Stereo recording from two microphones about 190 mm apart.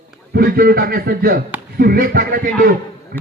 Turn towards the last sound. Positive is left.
turn(degrees=-55)  # may be behind; listen again after turning